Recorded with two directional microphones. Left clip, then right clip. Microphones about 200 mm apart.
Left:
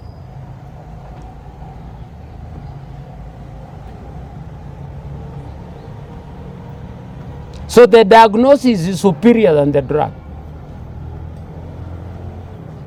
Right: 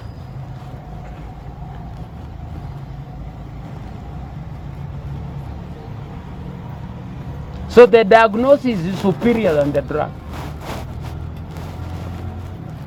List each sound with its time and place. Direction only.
7.7 s a man's voice: 75° left (ahead or behind)